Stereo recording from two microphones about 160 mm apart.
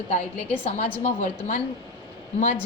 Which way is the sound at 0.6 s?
40° left (ahead or behind).